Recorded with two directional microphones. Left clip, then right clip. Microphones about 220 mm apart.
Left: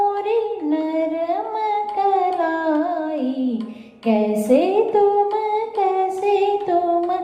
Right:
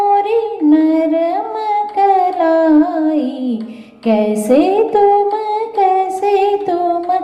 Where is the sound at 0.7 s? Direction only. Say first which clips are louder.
Right 9 dB; 50° right (ahead or behind).